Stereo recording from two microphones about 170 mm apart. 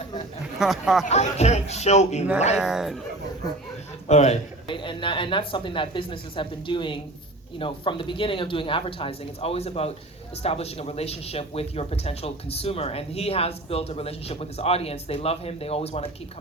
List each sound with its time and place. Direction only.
0.6 s speech: centre (ahead or behind)
1.0 s speech: 40° left (ahead or behind)
2.6 s speech: 5° right (ahead or behind)
4.1 s a man's voice: 40° left (ahead or behind)